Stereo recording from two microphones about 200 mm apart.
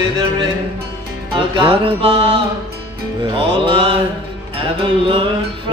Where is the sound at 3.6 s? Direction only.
25° right (ahead or behind).